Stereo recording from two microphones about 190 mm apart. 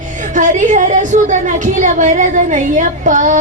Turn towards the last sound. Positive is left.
turn(degrees=-40)  # may be behind; listen again after turning